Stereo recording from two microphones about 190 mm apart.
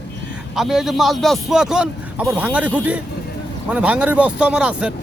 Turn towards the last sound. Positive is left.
turn(degrees=-5)  # may be behind; listen again after turning